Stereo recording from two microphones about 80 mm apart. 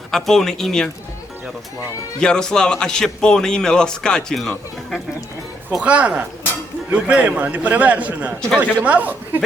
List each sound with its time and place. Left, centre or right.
0.1 s speech: centre
2.2 s a man's voice: centre
5.8 s a man's voice: centre